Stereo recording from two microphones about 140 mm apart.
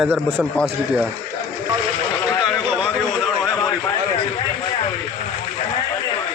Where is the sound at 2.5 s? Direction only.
Centre (ahead or behind).